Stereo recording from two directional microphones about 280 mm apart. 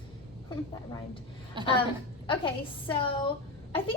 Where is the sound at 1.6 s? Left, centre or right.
Centre.